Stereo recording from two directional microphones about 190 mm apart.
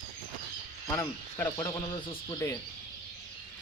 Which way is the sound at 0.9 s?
10° left (ahead or behind).